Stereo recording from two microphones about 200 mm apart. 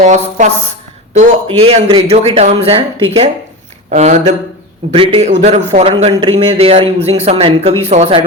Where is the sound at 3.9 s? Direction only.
35° right (ahead or behind).